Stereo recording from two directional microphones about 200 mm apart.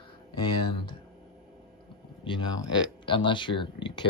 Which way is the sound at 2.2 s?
25° left (ahead or behind).